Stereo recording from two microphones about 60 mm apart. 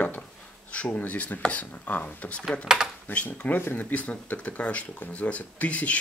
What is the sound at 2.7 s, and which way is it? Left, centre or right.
Speech, centre.